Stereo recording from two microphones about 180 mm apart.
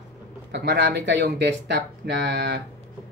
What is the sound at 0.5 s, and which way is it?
Speech, 75° right (ahead or behind).